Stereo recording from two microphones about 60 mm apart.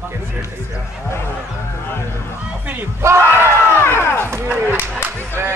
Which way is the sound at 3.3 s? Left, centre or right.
Right.